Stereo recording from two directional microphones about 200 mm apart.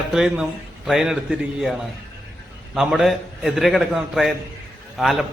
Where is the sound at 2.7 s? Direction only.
Centre (ahead or behind).